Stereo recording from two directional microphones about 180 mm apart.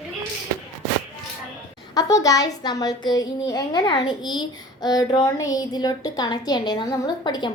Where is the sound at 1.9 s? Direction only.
20° left (ahead or behind).